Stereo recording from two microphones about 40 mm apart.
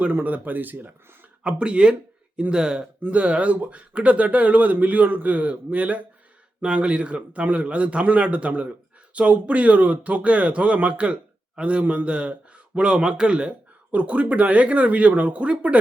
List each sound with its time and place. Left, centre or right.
0.1 s speech: right
1.5 s speech: right
3.1 s speech: right